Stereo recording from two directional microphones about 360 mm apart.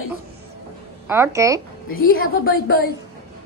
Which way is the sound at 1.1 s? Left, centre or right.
Centre.